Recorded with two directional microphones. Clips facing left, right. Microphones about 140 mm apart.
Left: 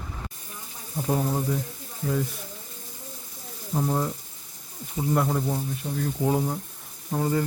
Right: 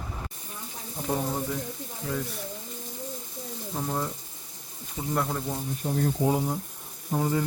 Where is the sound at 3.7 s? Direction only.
10° left (ahead or behind).